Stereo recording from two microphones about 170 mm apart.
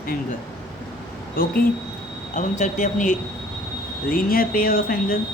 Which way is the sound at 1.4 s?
60° left (ahead or behind).